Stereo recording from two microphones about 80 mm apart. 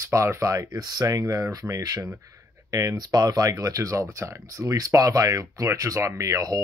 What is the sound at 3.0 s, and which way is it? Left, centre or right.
Speech, right.